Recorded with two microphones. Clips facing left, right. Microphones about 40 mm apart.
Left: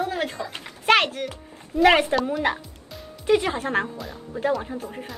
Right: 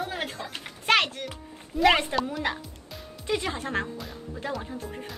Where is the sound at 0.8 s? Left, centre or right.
Centre.